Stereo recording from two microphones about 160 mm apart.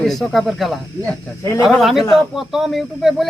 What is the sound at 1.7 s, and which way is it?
Speech, centre (ahead or behind).